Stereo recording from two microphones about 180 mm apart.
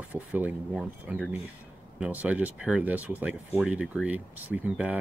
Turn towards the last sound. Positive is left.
turn(degrees=-10)  # may be behind; listen again after turning